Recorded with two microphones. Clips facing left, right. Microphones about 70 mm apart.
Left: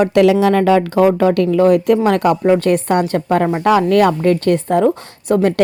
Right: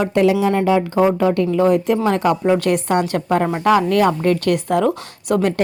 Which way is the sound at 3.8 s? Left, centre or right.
Left.